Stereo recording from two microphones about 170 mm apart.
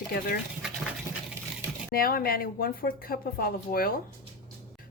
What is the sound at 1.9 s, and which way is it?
A woman's voice, 60° left (ahead or behind).